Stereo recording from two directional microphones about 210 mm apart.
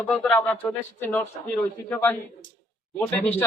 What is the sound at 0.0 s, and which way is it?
Speech, 5° left (ahead or behind).